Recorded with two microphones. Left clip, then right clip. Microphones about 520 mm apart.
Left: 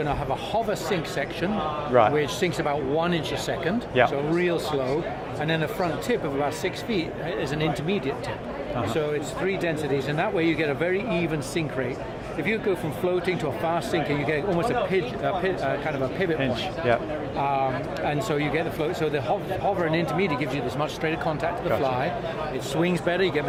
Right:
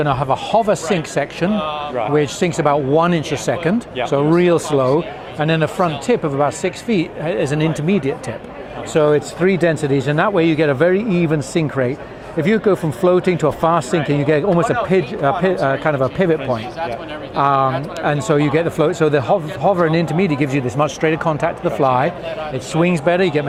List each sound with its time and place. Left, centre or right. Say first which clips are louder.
0.0 s speech: right 9 dB; right
17.4 s speech: right 10 dB; right